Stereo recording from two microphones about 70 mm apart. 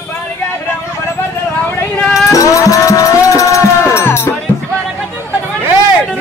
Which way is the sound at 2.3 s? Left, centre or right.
Left.